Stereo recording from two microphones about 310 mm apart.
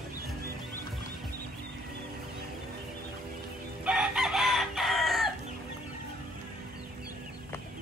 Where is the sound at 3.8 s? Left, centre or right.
Centre.